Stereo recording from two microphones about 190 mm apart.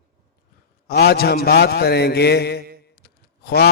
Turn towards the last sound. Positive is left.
turn(degrees=55)  # may be behind; listen again after turning